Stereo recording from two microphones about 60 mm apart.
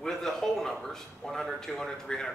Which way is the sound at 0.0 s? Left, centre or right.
Centre.